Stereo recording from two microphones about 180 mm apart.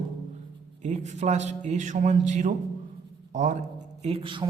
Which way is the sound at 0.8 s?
40° right (ahead or behind).